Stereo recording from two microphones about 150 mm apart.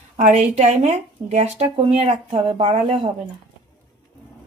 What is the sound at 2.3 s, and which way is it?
Speech, 35° right (ahead or behind).